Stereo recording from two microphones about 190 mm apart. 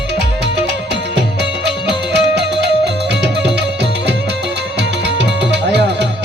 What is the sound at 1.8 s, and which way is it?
Music, 60° right (ahead or behind).